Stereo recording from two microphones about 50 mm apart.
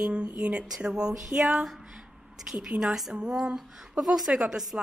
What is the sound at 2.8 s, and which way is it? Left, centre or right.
A woman's voice, centre.